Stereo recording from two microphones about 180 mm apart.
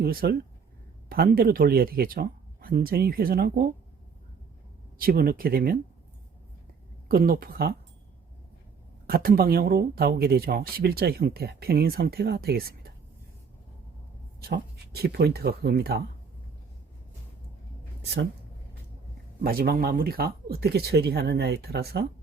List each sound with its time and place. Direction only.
0.0 s speech: 55° right (ahead or behind)
4.9 s speech: 55° right (ahead or behind)
7.1 s speech: 55° right (ahead or behind)
9.0 s speech: 55° right (ahead or behind)
14.4 s speech: 65° right (ahead or behind)
18.0 s speech: 70° right (ahead or behind)
19.4 s speech: 55° right (ahead or behind)